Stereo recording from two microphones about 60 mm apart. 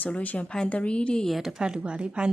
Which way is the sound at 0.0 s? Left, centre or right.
Left.